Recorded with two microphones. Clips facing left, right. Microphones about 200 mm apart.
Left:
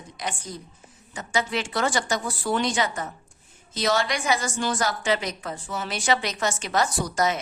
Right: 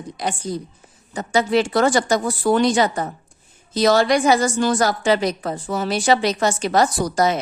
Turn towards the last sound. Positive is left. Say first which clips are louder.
# right 6 dB
turn(degrees=-35)  # may be behind; listen again after turning